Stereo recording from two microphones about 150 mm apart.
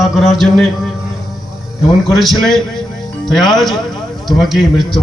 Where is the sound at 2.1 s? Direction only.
Centre (ahead or behind).